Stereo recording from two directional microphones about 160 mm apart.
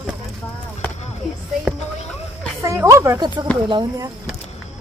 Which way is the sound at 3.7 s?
25° right (ahead or behind).